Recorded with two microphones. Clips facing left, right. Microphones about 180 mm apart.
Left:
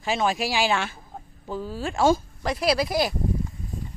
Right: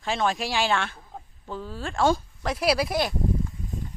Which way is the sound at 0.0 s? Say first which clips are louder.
Left 2 dB; 5° left (ahead or behind).